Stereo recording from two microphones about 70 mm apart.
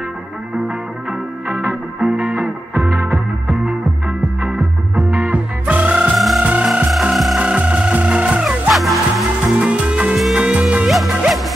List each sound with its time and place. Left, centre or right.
1.5 s music: right
2.0 s music: centre
4.9 s music: centre
6.1 s music: centre
7.3 s music: centre
8.7 s music: centre
9.6 s music: centre
10.1 s music: centre
10.4 s music: centre
10.9 s music: centre